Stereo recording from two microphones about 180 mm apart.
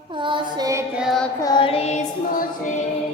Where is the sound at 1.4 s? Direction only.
25° left (ahead or behind).